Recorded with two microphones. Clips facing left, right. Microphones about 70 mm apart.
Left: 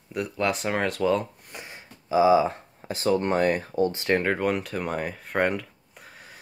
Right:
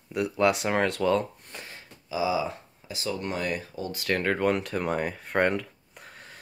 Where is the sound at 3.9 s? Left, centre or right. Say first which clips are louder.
Left 4 dB; left.